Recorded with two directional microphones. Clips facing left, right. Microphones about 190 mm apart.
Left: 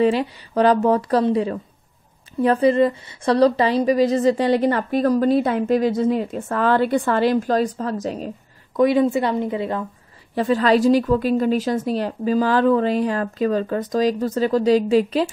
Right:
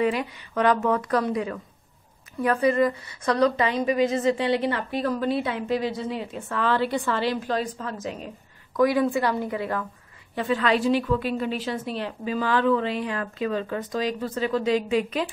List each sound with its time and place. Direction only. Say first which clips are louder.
0.0 s a woman's voice: left 6 dB; 30° left (ahead or behind)
8.7 s a woman's voice: left 4 dB; 25° left (ahead or behind)
10.3 s a woman's voice: left 6 dB; 40° left (ahead or behind)